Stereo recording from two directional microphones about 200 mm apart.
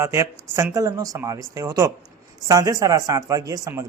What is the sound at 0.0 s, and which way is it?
A man's voice, 15° right (ahead or behind).